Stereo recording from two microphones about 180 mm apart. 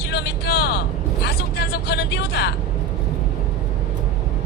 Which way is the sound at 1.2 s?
65° left (ahead or behind).